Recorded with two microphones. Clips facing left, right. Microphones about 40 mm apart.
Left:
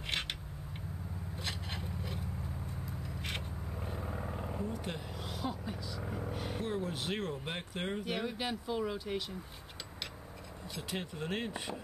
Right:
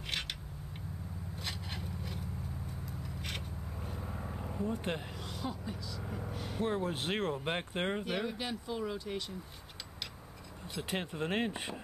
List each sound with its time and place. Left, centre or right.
1.4 s a sound: centre
3.3 s vehicle: centre
4.6 s speech: right
5.2 s speech: centre
6.6 s speech: right
8.0 s speech: centre
10.7 s speech: right